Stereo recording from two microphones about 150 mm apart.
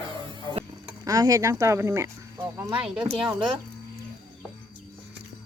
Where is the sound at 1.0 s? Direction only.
25° right (ahead or behind).